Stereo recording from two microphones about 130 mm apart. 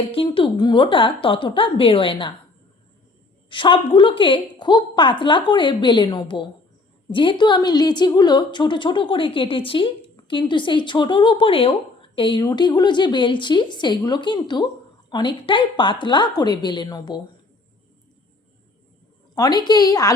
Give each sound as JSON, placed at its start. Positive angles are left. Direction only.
{"t": 0.0, "sound": "a woman's voice", "side_deg": 45}
{"t": 3.5, "sound": "a woman's voice", "side_deg": 40}
{"t": 19.3, "sound": "a woman's voice", "side_deg": 30}